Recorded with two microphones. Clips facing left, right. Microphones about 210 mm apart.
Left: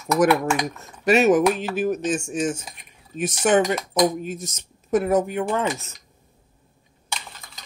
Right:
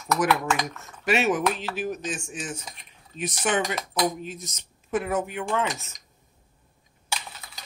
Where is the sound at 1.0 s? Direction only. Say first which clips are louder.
Left 7 dB; 40° left (ahead or behind).